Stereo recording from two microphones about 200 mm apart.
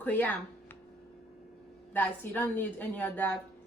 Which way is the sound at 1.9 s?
10° left (ahead or behind).